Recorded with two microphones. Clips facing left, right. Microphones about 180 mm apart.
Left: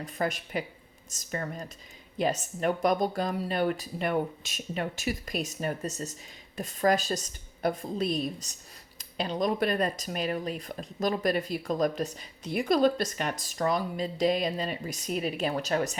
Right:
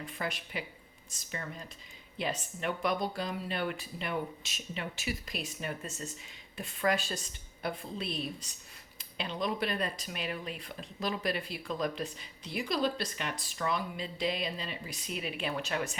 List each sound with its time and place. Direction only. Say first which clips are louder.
0.0 s a woman's voice: left 7 dB; 45° left (ahead or behind)